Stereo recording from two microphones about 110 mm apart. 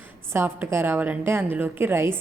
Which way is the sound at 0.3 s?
20° right (ahead or behind).